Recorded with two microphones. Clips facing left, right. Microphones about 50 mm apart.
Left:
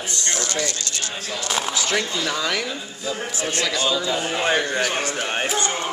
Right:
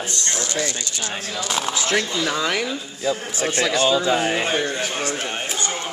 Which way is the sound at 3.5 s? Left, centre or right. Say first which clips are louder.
Right 4 dB; right.